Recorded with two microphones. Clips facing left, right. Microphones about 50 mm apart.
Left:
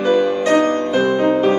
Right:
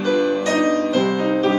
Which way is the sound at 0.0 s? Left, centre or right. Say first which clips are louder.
Left 3 dB; centre.